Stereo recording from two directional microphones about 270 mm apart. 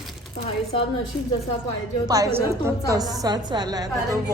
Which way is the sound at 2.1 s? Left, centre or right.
Centre.